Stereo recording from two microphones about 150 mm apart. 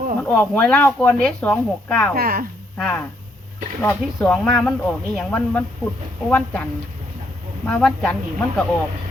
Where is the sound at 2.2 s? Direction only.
75° right (ahead or behind).